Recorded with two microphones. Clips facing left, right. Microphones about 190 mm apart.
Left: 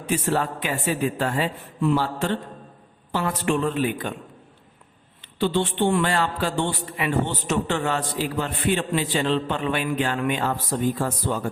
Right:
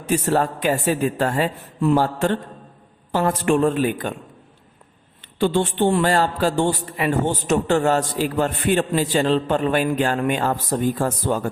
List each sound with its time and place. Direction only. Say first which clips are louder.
0.1 s a man's voice: right 4 dB; 40° right (ahead or behind)
5.2 s a man's voice: right 3 dB; 50° right (ahead or behind)